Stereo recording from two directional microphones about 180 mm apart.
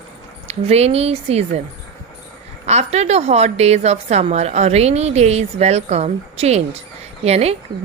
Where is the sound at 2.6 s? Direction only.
35° right (ahead or behind).